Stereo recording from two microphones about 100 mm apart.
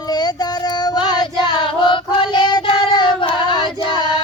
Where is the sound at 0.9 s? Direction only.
50° left (ahead or behind).